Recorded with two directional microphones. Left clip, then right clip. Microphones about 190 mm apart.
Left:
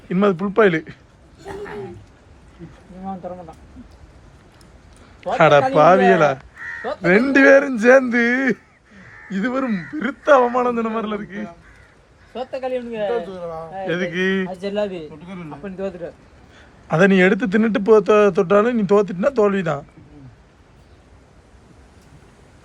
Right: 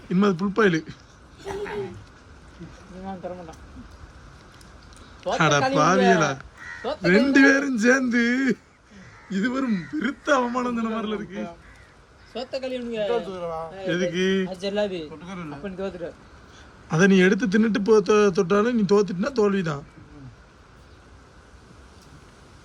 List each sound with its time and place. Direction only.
0.1 s a man's voice: 10° right (ahead or behind)
5.4 s a man's voice: 5° right (ahead or behind)
12.3 s a man's voice: centre (ahead or behind)
13.1 s speech: 30° right (ahead or behind)
13.8 s a man's voice: 5° right (ahead or behind)
15.4 s speech: 30° left (ahead or behind)
16.6 s a man's voice: 5° right (ahead or behind)